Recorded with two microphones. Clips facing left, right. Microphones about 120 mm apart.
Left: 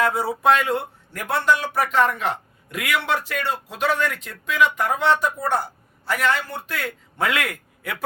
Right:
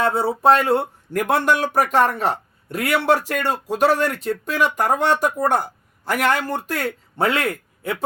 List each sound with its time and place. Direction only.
0.0 s speech: 30° right (ahead or behind)
1.1 s a man's voice: 55° right (ahead or behind)
6.5 s a man's voice: 45° right (ahead or behind); by 8.0 s 25° right (ahead or behind)